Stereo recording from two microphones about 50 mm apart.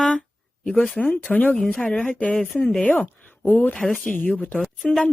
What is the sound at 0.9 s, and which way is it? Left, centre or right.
Speech, left.